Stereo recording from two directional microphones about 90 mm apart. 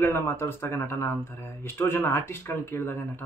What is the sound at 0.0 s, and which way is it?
Speech, 30° left (ahead or behind).